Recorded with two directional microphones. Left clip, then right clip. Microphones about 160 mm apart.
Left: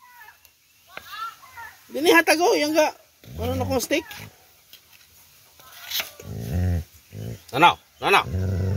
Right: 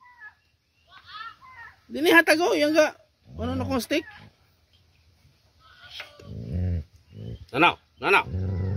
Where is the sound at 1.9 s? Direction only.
30° right (ahead or behind).